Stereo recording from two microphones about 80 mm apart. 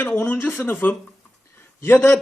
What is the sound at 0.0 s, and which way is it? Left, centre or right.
A man's voice, left.